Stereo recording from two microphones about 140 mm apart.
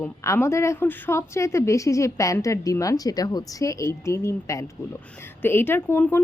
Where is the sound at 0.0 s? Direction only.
15° left (ahead or behind).